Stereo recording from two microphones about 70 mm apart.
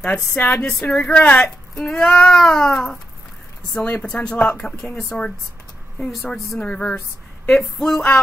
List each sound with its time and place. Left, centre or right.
0.0 s a woman's voice: centre